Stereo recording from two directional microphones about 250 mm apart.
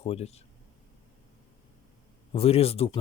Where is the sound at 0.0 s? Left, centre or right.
Left.